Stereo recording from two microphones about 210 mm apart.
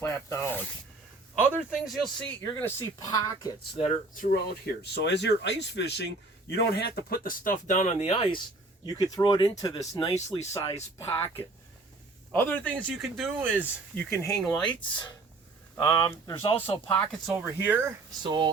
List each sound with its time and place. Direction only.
0.0 s zipper: 10° left (ahead or behind)
1.4 s speech: 5° right (ahead or behind)
2.4 s speech: 10° left (ahead or behind)
3.8 s speech: 35° left (ahead or behind)
4.3 s speech: 50° left (ahead or behind); by 13.7 s 5° right (ahead or behind)
13.9 s speech: 10° left (ahead or behind)
14.6 s speech: 20° left (ahead or behind)
16.9 s speech: 5° left (ahead or behind)
17.3 s speech: 10° right (ahead or behind)
18.2 s speech: 20° right (ahead or behind)